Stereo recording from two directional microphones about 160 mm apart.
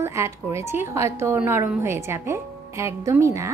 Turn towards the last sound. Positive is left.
turn(degrees=-20)  # may be behind; listen again after turning